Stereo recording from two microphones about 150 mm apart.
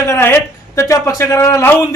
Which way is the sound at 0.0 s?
15° left (ahead or behind).